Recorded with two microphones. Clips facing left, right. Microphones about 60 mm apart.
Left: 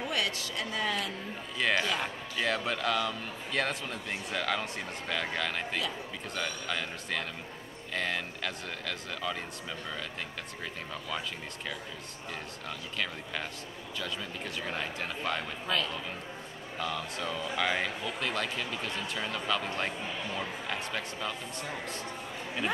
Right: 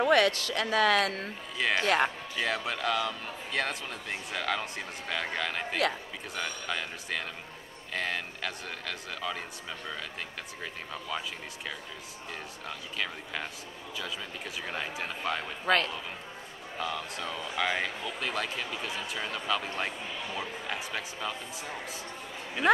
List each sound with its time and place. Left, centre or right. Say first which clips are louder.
0.0 s speech: right 9 dB; right
1.6 s a man's voice: right 3 dB; centre
10.6 s a man's voice: right 1 dB; centre
12.6 s a man's voice: even; centre
15.6 s a man's voice: right 7 dB; right
16.7 s a man's voice: even; centre